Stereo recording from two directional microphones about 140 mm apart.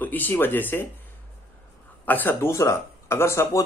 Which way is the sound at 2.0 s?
15° left (ahead or behind).